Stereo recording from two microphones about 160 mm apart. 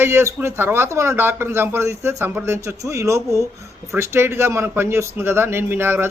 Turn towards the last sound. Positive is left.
turn(degrees=-15)  # may be behind; listen again after turning